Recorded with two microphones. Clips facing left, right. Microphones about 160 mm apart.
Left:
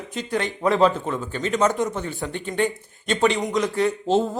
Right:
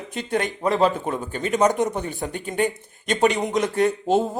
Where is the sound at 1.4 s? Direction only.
15° right (ahead or behind).